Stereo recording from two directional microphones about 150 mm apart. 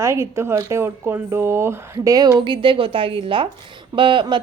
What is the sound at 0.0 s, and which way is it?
Speech, 20° right (ahead or behind).